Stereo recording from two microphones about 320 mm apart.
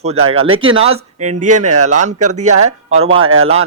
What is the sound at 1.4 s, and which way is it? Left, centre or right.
Speech, right.